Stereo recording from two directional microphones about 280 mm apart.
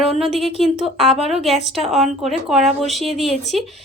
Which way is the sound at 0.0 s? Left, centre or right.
Centre.